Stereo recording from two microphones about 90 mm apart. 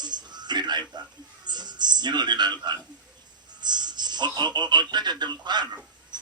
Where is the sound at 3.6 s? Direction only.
55° right (ahead or behind).